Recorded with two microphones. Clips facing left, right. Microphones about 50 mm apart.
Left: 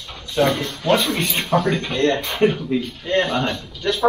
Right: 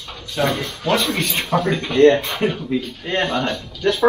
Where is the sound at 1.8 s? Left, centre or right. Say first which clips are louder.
Right 6 dB; right.